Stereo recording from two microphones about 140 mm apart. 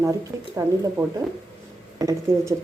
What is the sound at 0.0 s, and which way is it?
Speech, 25° right (ahead or behind).